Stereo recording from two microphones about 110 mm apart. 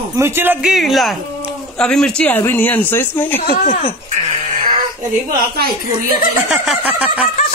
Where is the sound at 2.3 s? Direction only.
20° left (ahead or behind).